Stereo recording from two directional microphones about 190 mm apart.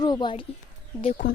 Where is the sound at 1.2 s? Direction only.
70° left (ahead or behind).